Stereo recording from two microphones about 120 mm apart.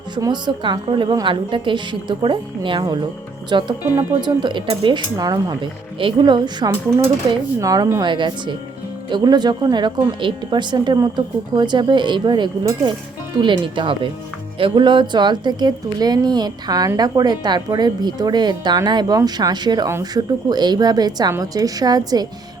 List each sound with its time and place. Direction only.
0.2 s a woman's voice: 40° right (ahead or behind)
7.6 s speech: 30° right (ahead or behind)
8.0 s a woman's voice: 40° right (ahead or behind)